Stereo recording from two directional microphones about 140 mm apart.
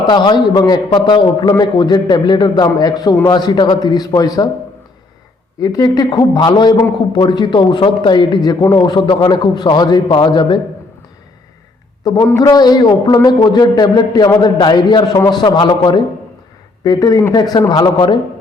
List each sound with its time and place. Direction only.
0.1 s a man's voice: 30° left (ahead or behind)
5.5 s a man's voice: 25° left (ahead or behind)
12.1 s a man's voice: 25° left (ahead or behind)